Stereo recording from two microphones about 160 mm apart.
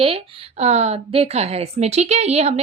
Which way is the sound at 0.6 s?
45° right (ahead or behind).